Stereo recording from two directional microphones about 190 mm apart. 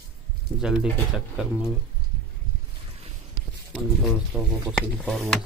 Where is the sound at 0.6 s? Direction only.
5° right (ahead or behind).